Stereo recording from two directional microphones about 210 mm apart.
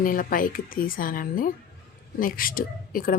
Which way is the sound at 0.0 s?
40° left (ahead or behind).